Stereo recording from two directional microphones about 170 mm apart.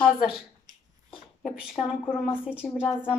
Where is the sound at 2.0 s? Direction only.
10° left (ahead or behind).